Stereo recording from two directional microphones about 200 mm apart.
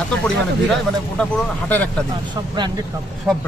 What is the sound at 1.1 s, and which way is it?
Speech, 5° left (ahead or behind).